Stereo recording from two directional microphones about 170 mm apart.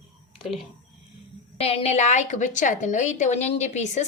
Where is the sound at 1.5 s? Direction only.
35° left (ahead or behind).